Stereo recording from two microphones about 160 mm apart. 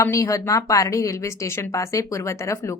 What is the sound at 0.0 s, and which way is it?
Speech, 20° left (ahead or behind).